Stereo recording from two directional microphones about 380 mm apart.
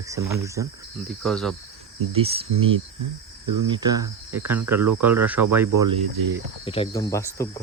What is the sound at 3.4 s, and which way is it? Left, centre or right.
Speech, right.